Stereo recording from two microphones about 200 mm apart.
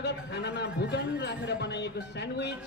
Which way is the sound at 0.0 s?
60° left (ahead or behind).